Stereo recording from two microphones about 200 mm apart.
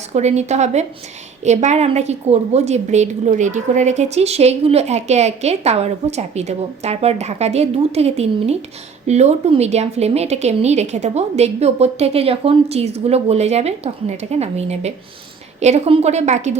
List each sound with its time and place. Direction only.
0.1 s a woman's voice: 35° right (ahead or behind)